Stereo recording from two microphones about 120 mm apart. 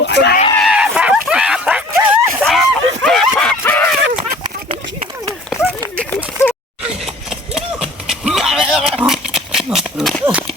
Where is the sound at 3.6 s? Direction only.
20° left (ahead or behind).